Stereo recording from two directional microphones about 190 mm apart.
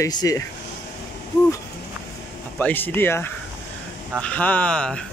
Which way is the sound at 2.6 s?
10° left (ahead or behind).